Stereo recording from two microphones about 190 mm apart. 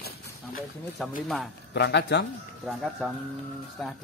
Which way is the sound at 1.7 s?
65° left (ahead or behind).